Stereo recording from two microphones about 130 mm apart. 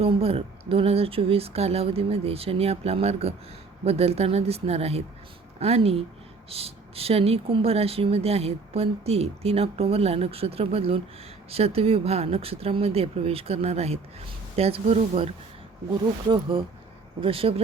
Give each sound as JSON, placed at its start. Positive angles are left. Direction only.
{"t": 0.0, "sound": "speech", "side_deg": -50}
{"t": 17.2, "sound": "speech", "side_deg": -45}